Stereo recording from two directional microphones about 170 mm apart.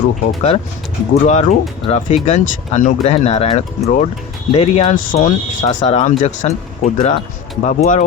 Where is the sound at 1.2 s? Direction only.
45° left (ahead or behind).